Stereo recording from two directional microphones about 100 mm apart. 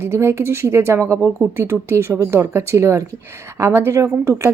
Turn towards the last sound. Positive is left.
turn(degrees=-25)  # may be behind; listen again after turning